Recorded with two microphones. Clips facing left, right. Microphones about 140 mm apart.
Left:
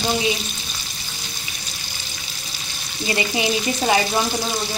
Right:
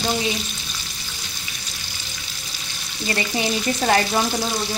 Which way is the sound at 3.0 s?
15° left (ahead or behind).